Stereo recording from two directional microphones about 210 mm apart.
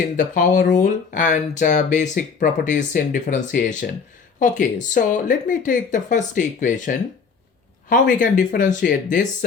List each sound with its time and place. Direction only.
0.3 s speech: 40° left (ahead or behind)